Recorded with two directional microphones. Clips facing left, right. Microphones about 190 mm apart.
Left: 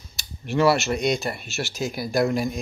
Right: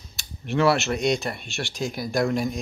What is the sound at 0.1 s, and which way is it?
Speech, centre (ahead or behind).